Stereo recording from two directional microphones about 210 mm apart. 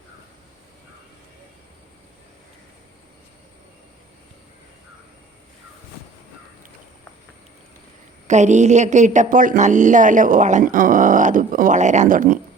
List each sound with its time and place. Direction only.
8.3 s a woman's voice: 35° right (ahead or behind)